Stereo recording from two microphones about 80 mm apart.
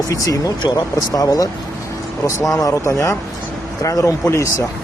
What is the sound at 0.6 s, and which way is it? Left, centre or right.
Speech, left.